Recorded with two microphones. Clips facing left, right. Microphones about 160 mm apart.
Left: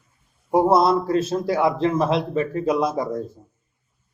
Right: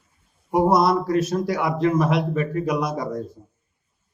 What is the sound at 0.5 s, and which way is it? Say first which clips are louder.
A man's voice: left 1 dB; 25° left (ahead or behind).